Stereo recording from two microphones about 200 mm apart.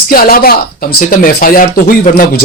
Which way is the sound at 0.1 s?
45° left (ahead or behind).